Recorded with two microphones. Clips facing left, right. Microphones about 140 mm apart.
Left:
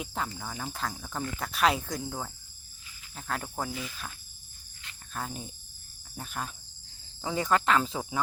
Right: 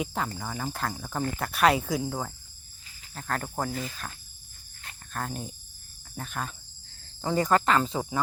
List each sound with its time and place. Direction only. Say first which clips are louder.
0.0 s speech: right 4 dB; centre (ahead or behind)
3.7 s cricket: right 4 dB; 50° right (ahead or behind)
5.1 s speech: right 3 dB; centre (ahead or behind)